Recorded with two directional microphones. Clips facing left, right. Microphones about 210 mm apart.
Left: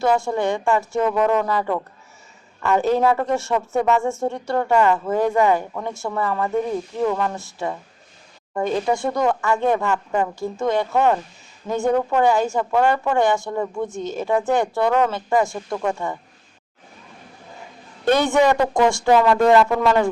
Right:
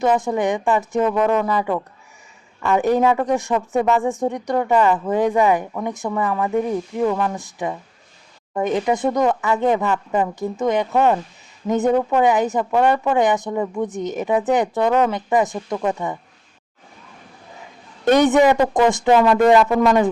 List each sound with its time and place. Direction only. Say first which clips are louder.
0.0 s a woman's voice: right 1 dB; 20° right (ahead or behind)
2.7 s a woman's voice: right 1 dB; 15° right (ahead or behind)
18.0 s a man's voice: right 3 dB; 20° right (ahead or behind)